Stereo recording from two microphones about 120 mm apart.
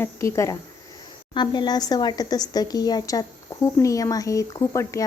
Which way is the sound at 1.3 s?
40° left (ahead or behind).